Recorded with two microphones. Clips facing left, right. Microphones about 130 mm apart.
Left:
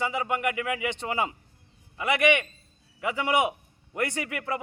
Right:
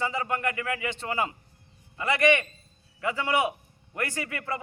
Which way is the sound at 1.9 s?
15° left (ahead or behind).